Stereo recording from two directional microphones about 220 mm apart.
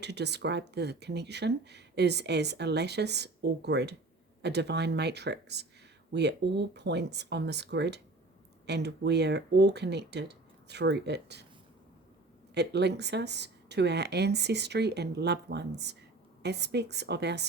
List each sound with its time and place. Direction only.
0.0 s speech: 50° right (ahead or behind)
12.5 s speech: 50° right (ahead or behind)